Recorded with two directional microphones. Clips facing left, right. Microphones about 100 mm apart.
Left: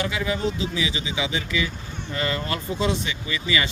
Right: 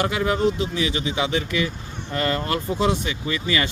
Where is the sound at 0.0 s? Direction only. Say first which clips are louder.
Right 4 dB; 50° right (ahead or behind).